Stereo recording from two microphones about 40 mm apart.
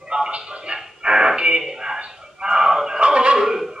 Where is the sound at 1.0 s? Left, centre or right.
Centre.